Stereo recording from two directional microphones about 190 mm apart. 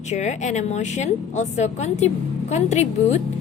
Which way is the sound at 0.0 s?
35° left (ahead or behind).